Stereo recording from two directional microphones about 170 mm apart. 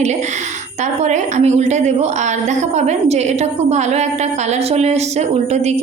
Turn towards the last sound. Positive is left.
turn(degrees=-40)  # may be behind; listen again after turning